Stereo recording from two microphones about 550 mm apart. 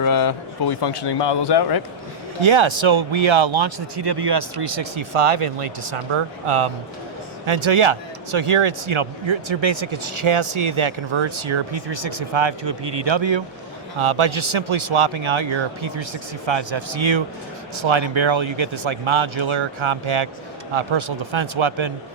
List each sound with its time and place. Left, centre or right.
0.0 s speech: left
2.4 s speech: right
4.6 s speech: right